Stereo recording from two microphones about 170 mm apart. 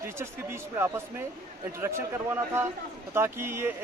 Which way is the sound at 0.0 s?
15° right (ahead or behind).